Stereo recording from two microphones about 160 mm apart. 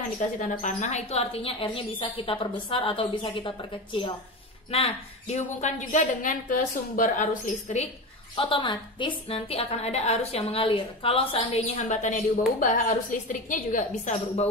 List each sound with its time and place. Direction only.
0.4 s a woman's voice: 50° left (ahead or behind); by 3.5 s 30° left (ahead or behind)
4.6 s a woman's voice: 40° left (ahead or behind)
8.4 s a woman's voice: 35° left (ahead or behind)
11.7 s a woman's voice: 50° left (ahead or behind)